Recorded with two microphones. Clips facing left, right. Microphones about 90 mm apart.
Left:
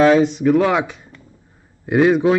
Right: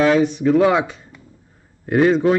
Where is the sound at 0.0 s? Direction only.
25° left (ahead or behind).